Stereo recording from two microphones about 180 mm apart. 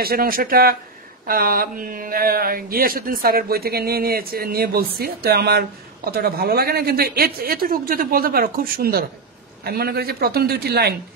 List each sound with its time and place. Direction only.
0.0 s speech: 55° right (ahead or behind)